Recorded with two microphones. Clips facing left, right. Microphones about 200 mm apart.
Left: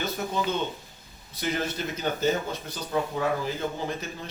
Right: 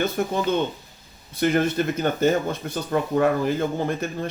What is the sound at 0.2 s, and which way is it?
Speech, 55° right (ahead or behind).